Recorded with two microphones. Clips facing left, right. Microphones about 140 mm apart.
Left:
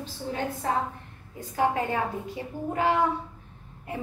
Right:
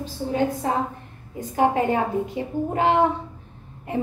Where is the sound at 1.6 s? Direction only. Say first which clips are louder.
Right 5 dB; 20° right (ahead or behind).